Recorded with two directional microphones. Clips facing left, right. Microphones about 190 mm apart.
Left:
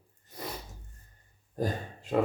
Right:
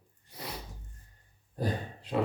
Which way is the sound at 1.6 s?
45° left (ahead or behind).